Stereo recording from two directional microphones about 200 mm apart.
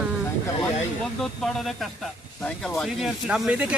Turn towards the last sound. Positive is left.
turn(degrees=-5)  # may be behind; listen again after turning